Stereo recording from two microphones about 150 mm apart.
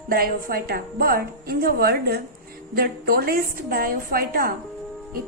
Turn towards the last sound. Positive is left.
turn(degrees=-75)  # may be behind; listen again after turning